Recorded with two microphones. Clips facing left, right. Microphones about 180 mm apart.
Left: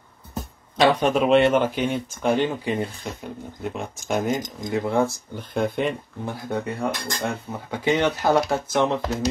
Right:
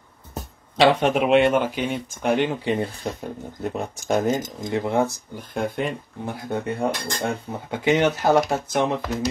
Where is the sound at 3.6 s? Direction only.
40° right (ahead or behind).